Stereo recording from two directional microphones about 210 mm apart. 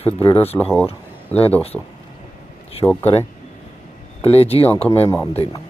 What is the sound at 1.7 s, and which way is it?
Speech, centre (ahead or behind).